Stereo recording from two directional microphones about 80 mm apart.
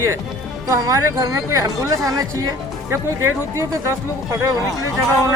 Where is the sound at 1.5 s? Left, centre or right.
Right.